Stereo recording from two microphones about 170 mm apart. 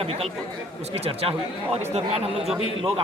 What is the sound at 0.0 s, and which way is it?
Speech, 35° right (ahead or behind).